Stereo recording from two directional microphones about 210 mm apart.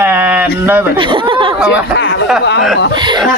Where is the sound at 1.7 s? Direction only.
55° left (ahead or behind).